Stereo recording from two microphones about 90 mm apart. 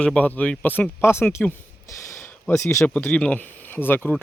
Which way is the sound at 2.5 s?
35° left (ahead or behind).